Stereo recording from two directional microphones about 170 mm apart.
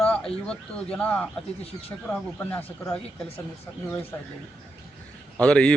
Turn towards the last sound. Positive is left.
turn(degrees=5)  # may be behind; listen again after turning